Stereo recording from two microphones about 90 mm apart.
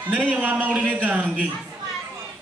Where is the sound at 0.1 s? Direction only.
15° right (ahead or behind).